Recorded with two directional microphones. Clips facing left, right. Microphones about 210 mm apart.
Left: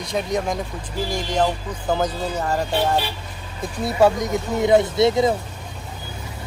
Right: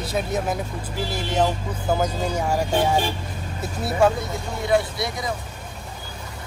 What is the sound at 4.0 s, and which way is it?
Speech, 15° left (ahead or behind).